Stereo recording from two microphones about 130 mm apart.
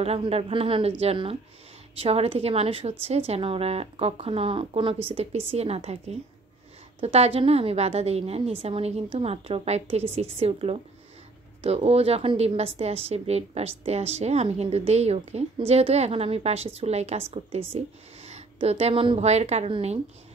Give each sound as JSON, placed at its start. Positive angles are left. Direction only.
{"t": 0.0, "sound": "a woman's voice", "side_deg": -50}